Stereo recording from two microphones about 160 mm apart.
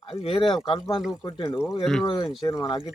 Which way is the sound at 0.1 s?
35° left (ahead or behind).